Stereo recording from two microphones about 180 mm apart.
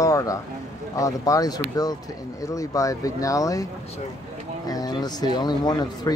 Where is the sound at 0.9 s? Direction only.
20° left (ahead or behind).